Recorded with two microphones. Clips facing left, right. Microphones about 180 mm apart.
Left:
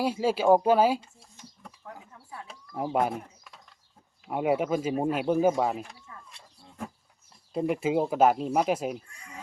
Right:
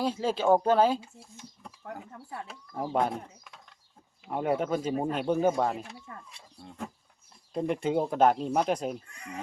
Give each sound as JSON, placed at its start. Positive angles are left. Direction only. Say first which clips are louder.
{"t": 0.0, "sound": "speech", "louder": "left 2 dB", "side_deg": 10}
{"t": 1.0, "sound": "a sound", "louder": "right 4 dB", "side_deg": 0}
{"t": 2.5, "sound": "speech", "louder": "left 2 dB", "side_deg": 5}
{"t": 9.1, "sound": "speech", "louder": "right 6 dB", "side_deg": -65}